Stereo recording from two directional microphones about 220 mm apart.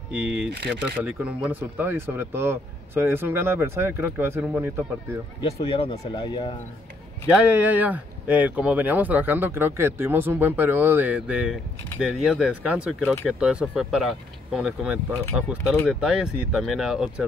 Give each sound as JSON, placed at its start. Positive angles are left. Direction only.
{"t": 0.1, "sound": "speech", "side_deg": -5}
{"t": 5.4, "sound": "speech", "side_deg": 25}
{"t": 7.2, "sound": "speech", "side_deg": -5}
{"t": 15.5, "sound": "speech", "side_deg": 5}